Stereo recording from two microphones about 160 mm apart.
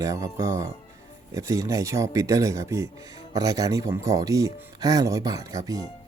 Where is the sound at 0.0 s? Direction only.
20° right (ahead or behind).